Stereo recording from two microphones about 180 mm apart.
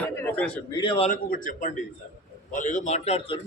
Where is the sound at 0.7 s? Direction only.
25° left (ahead or behind).